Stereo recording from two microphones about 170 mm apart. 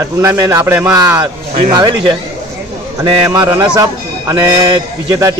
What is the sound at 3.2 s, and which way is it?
A man's voice, 15° right (ahead or behind).